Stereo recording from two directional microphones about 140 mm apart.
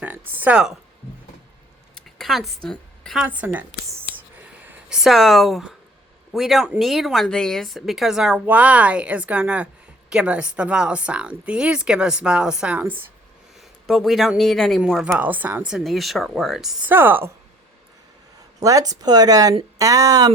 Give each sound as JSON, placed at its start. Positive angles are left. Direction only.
{"t": 0.0, "sound": "speech", "side_deg": -15}
{"t": 2.1, "sound": "speech", "side_deg": 0}
{"t": 2.6, "sound": "a sound", "side_deg": 5}
{"t": 3.2, "sound": "speech", "side_deg": -10}
{"t": 4.4, "sound": "a sound", "side_deg": -10}
{"t": 6.3, "sound": "speech", "side_deg": 0}
{"t": 13.8, "sound": "speech", "side_deg": 0}
{"t": 15.2, "sound": "speech", "side_deg": -10}
{"t": 16.9, "sound": "speech", "side_deg": -15}
{"t": 18.3, "sound": "speech", "side_deg": -25}